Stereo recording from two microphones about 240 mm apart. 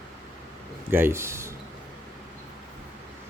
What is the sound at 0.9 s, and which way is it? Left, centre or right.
Speech, centre.